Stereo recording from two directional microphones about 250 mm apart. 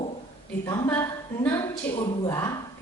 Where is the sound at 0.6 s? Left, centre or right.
Centre.